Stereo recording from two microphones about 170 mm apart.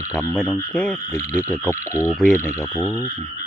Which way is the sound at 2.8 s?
15° left (ahead or behind).